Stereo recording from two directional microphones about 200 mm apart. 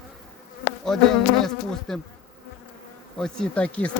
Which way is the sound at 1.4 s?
Centre (ahead or behind).